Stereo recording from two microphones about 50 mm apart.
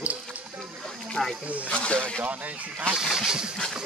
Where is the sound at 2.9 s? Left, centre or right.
Centre.